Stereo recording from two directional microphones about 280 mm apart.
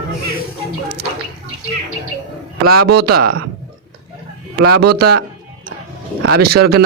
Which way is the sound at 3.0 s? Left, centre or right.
Right.